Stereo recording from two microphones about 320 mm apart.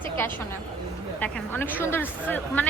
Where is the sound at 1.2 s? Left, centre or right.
Centre.